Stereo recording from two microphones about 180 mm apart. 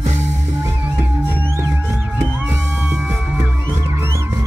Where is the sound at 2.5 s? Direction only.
10° right (ahead or behind).